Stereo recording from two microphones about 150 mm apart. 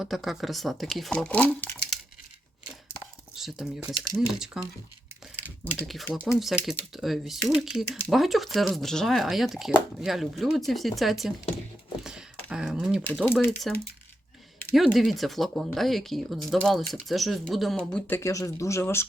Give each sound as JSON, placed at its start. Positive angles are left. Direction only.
{"t": 0.0, "sound": "speech", "side_deg": 0}
{"t": 3.3, "sound": "speech", "side_deg": 0}
{"t": 5.8, "sound": "speech", "side_deg": 0}
{"t": 12.0, "sound": "computer keyboard", "side_deg": -5}
{"t": 13.2, "sound": "speech", "side_deg": 15}
{"t": 14.8, "sound": "speech", "side_deg": 0}
{"t": 18.2, "sound": "speech", "side_deg": 20}